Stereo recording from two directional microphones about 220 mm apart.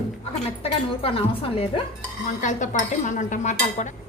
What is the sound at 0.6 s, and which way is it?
A woman's voice, 25° left (ahead or behind).